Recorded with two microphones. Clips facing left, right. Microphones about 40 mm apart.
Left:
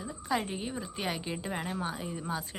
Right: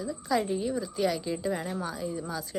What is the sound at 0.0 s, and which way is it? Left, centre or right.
Speech, left.